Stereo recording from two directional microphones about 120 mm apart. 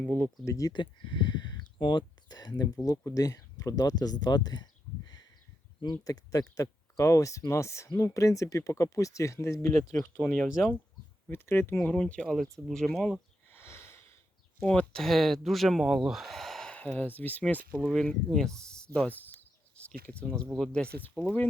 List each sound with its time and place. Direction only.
0.4 s speech: 30° left (ahead or behind)
0.7 s speech: 40° left (ahead or behind); by 9.9 s 25° left (ahead or behind)
11.3 s speech: 20° left (ahead or behind)
11.8 s speech: 10° left (ahead or behind)
13.5 s sniff: 20° left (ahead or behind)
14.6 s speech: 10° left (ahead or behind)